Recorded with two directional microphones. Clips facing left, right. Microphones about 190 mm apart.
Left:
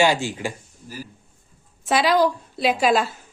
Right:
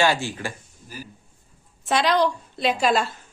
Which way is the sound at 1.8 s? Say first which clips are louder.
Left 2 dB; 5° left (ahead or behind).